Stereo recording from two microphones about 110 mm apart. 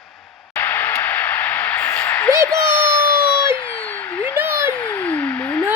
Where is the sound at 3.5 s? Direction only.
15° left (ahead or behind).